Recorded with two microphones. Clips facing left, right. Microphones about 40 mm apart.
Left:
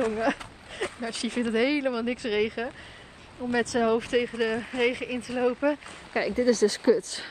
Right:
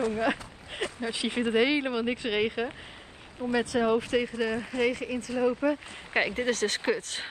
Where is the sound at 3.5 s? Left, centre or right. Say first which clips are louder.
Left 1 dB; centre.